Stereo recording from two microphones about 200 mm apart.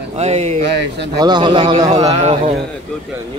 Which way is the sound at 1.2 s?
25° right (ahead or behind).